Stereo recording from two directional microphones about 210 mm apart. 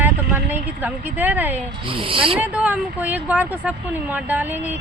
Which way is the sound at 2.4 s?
5° right (ahead or behind).